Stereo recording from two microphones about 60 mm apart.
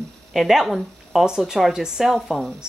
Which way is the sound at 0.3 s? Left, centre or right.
Centre.